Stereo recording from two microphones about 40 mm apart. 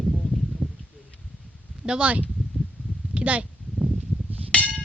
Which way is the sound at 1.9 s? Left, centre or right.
Right.